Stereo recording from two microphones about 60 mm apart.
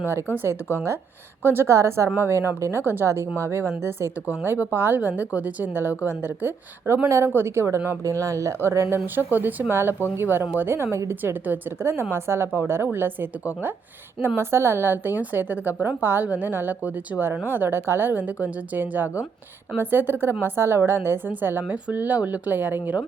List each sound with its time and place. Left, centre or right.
0.0 s a woman's voice: right
2.8 s a woman's voice: right
3.1 s a woman's voice: right
4.4 s a woman's voice: right
8.0 s speech: right
9.1 s a woman's voice: right
9.6 s a woman's voice: right
11.8 s a woman's voice: right
14.3 s a woman's voice: right